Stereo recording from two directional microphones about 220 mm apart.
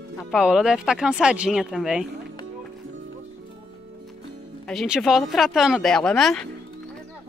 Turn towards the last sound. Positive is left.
turn(degrees=0)  # may be behind; listen again after turning